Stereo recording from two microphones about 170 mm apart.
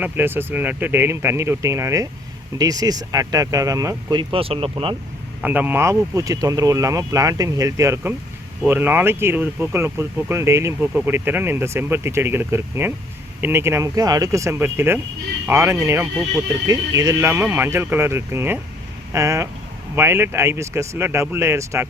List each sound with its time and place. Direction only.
0.0 s speech: 10° right (ahead or behind); by 4.9 s 35° right (ahead or behind)
5.4 s speech: 10° right (ahead or behind)